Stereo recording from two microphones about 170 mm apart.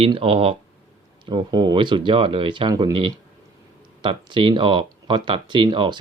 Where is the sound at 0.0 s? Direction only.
35° right (ahead or behind).